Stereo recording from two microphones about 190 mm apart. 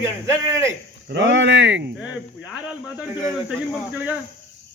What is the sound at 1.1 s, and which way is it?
Speech, 80° right.